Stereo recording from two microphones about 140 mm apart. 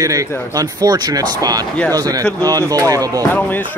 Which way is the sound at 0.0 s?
25° right (ahead or behind).